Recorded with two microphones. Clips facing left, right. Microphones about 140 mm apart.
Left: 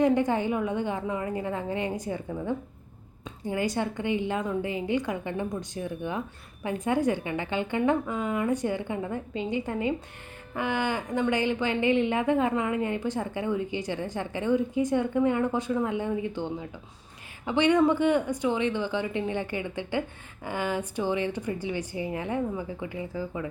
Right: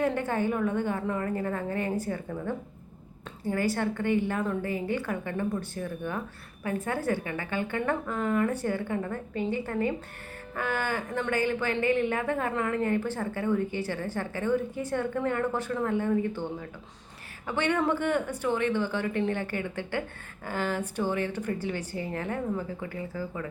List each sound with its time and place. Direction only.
0.0 s speech: 15° left (ahead or behind)